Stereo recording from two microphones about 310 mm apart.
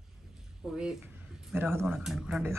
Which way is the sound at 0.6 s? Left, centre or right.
Centre.